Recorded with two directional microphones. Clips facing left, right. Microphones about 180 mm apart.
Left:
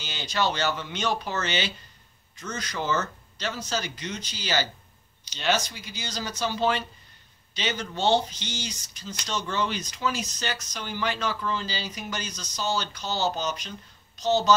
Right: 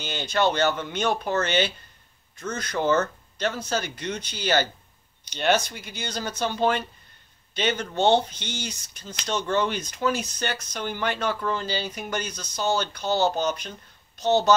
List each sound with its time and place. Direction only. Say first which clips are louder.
0.0 s speech: right 4 dB; 55° right (ahead or behind)